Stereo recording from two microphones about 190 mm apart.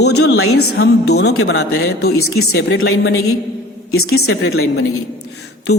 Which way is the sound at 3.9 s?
60° left (ahead or behind).